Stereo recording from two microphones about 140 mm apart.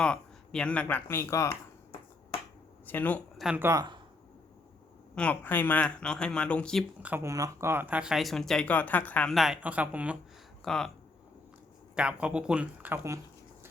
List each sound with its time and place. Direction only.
0.0 s speech: 5° left (ahead or behind)
2.8 s speech: 10° left (ahead or behind)
3.3 s speech: 5° right (ahead or behind)
3.6 s speech: 20° right (ahead or behind)
5.1 s speech: 10° left (ahead or behind)
7.0 s speech: 15° right (ahead or behind)
10.6 s speech: 5° left (ahead or behind)
11.9 s speech: 5° right (ahead or behind)